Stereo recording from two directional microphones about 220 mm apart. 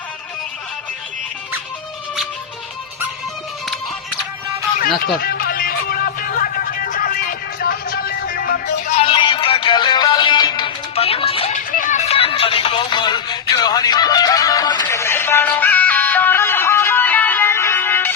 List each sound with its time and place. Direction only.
5.2 s music: 45° left (ahead or behind)
9.0 s music: 20° left (ahead or behind)